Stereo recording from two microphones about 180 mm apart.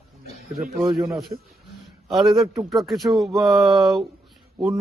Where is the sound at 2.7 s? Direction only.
Centre (ahead or behind).